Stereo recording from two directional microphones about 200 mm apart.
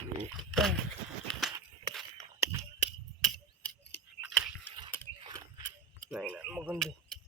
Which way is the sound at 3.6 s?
5° left (ahead or behind).